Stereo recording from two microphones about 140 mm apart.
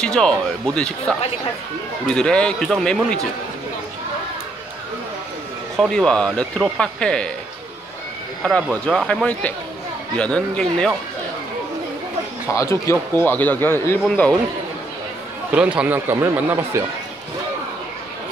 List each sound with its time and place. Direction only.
0.0 s speech: 5° left (ahead or behind)
5.8 s speech: 5° left (ahead or behind)
8.4 s speech: 5° left (ahead or behind)
12.5 s speech: 20° left (ahead or behind)
15.5 s speech: 10° right (ahead or behind)